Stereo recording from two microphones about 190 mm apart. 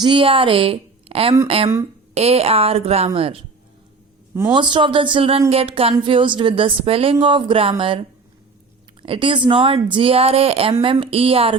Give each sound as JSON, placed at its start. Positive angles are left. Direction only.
{"t": 0.0, "sound": "a woman's voice", "side_deg": -25}
{"t": 4.5, "sound": "a woman's voice", "side_deg": -25}